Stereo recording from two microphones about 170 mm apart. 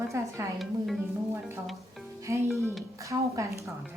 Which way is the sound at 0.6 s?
Centre (ahead or behind).